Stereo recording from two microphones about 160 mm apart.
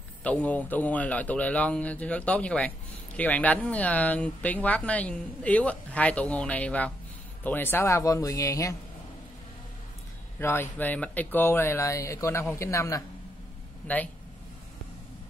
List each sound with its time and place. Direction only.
0.2 s speech: 10° left (ahead or behind)
10.4 s speech: 15° left (ahead or behind)